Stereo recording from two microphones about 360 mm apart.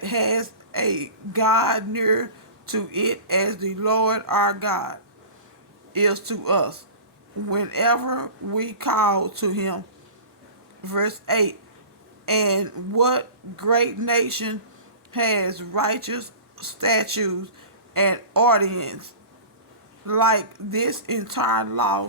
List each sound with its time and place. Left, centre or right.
0.0 s speech: right
10.8 s speech: right
12.2 s speech: right
20.1 s speech: right